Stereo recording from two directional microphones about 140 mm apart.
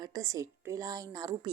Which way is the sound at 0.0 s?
25° right (ahead or behind).